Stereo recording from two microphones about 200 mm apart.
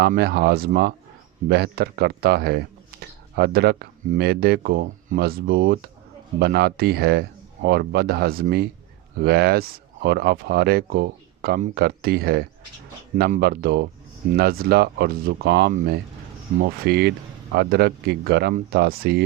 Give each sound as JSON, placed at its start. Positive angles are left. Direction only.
{"t": 0.0, "sound": "speech", "side_deg": -55}